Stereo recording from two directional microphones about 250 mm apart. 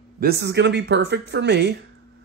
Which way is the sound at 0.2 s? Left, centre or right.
Right.